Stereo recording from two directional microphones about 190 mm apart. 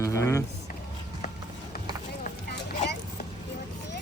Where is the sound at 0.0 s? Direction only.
15° left (ahead or behind).